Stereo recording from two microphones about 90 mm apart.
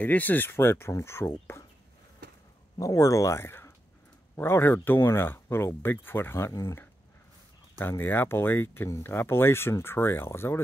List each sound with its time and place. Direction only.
0.0 s speech: 20° left (ahead or behind)
2.8 s speech: 40° left (ahead or behind)
7.8 s speech: 25° left (ahead or behind)